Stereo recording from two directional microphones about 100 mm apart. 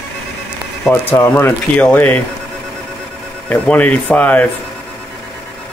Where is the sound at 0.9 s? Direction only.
25° left (ahead or behind).